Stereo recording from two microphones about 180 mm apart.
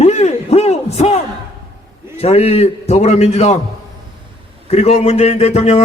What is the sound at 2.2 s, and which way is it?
Speech, 35° left (ahead or behind).